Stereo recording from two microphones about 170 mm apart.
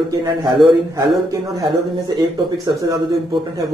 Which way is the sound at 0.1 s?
20° right (ahead or behind).